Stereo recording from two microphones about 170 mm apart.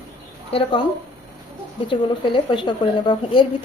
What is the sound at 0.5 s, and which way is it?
Speech, 35° left (ahead or behind).